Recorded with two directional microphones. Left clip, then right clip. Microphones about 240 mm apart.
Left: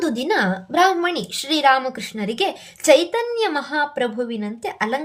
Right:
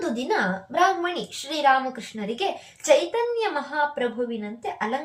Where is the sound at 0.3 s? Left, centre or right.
Left.